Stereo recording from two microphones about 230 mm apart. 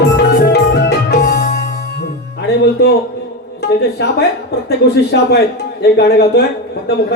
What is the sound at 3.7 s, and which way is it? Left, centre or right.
Speech, left.